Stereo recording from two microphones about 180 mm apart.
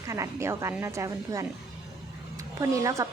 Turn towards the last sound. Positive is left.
turn(degrees=-15)  # may be behind; listen again after turning